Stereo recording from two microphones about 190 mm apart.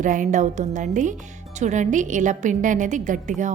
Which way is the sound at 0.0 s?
45° right (ahead or behind).